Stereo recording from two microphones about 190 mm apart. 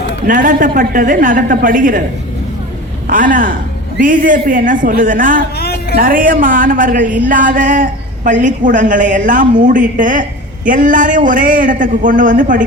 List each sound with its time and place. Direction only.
0.3 s speech: 45° right (ahead or behind)
3.1 s speech: 45° right (ahead or behind)
5.5 s music: 55° left (ahead or behind)
6.0 s speech: 45° right (ahead or behind)